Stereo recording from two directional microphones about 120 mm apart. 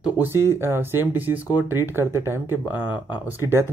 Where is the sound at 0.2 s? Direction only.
20° right (ahead or behind).